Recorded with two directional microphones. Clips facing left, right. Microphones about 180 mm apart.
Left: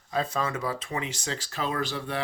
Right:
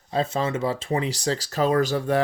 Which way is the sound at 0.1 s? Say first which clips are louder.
Right 4 dB; 25° right (ahead or behind).